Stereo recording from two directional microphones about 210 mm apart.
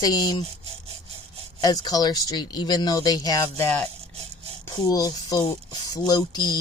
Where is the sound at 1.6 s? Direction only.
20° left (ahead or behind).